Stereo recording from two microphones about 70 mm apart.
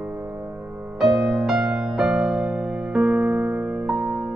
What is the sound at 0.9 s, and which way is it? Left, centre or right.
Music, centre.